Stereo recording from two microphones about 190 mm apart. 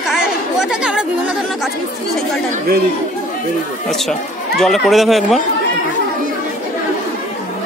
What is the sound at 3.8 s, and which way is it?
Speech, centre (ahead or behind).